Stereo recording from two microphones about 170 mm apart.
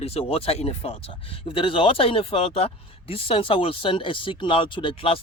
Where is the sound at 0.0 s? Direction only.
35° left (ahead or behind).